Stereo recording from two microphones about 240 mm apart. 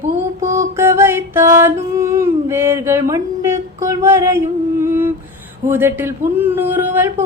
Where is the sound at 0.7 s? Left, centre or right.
Centre.